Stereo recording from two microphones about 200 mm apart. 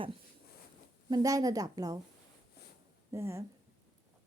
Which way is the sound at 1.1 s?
15° right (ahead or behind).